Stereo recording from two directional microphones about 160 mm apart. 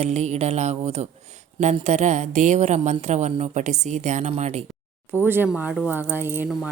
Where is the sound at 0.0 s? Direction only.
45° right (ahead or behind).